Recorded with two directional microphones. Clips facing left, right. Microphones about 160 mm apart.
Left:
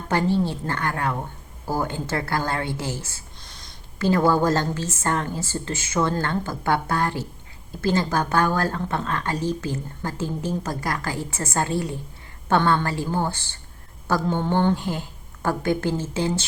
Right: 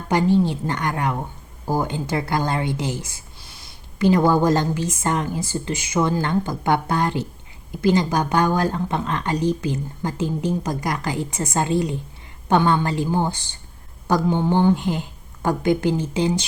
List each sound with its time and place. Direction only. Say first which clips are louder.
0.1 s speech: right 4 dB; 15° right (ahead or behind)